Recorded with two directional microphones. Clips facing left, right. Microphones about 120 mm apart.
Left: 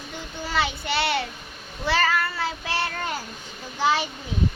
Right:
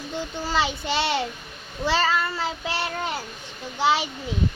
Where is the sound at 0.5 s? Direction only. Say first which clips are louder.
Right 1 dB; 25° right (ahead or behind).